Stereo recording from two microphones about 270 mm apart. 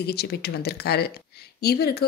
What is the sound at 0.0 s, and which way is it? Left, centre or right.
Speech, left.